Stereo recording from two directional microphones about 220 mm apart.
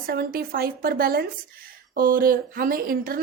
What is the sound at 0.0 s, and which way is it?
A woman's voice, 45° right (ahead or behind).